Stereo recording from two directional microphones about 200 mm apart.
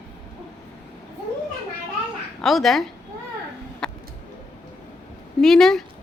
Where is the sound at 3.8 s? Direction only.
5° left (ahead or behind).